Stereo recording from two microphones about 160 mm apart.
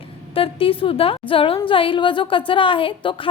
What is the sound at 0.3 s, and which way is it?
A woman's voice, 35° left (ahead or behind).